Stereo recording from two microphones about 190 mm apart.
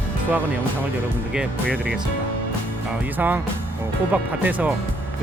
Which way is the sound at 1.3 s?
5° right (ahead or behind).